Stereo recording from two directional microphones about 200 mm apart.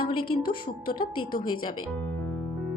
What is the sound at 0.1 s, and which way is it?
Speech, 25° left (ahead or behind).